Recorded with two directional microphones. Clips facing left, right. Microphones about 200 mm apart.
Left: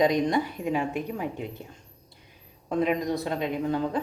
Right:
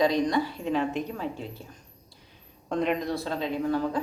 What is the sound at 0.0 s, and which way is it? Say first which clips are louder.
Speech: left 1 dB; 20° left (ahead or behind).